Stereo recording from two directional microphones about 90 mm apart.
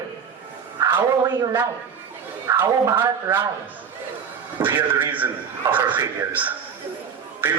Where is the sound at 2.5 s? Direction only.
35° right (ahead or behind).